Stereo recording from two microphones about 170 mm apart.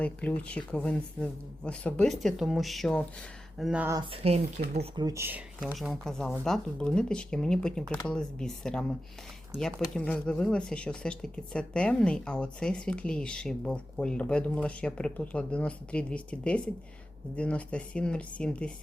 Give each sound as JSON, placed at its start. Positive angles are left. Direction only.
{"t": 0.0, "sound": "speech", "side_deg": 10}
{"t": 4.1, "sound": "speech", "side_deg": -35}
{"t": 4.9, "sound": "speech", "side_deg": -20}
{"t": 5.7, "sound": "speech", "side_deg": 0}